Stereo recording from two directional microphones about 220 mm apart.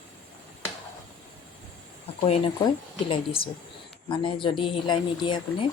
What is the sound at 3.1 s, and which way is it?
Speech, 25° left (ahead or behind).